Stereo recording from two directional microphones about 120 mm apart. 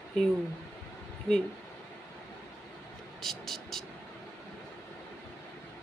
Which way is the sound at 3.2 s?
Centre (ahead or behind).